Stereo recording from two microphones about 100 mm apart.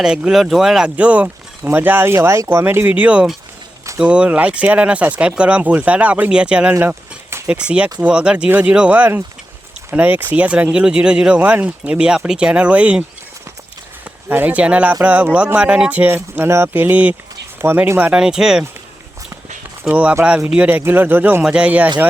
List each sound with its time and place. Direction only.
0.0 s speech: 5° right (ahead or behind)
6.7 s a sound: 25° right (ahead or behind)
7.5 s speech: 10° right (ahead or behind)
14.3 s speech: 20° right (ahead or behind)
19.9 s speech: 10° right (ahead or behind)
21.4 s speech: 10° right (ahead or behind)